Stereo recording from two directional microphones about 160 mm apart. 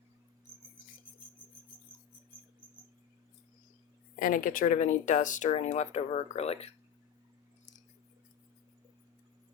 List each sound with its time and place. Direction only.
4.2 s speech: 60° left (ahead or behind); by 6.7 s 40° left (ahead or behind)